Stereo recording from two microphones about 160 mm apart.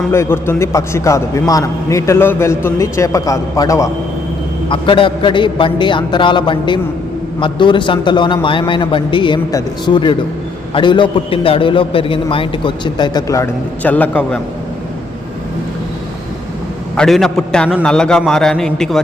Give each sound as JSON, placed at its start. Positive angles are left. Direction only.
{"t": 0.1, "sound": "a man's voice", "side_deg": 15}
{"t": 4.7, "sound": "a man's voice", "side_deg": 30}
{"t": 17.0, "sound": "a man's voice", "side_deg": 0}